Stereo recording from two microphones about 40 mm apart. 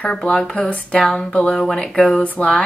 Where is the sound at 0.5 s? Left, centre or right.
Left.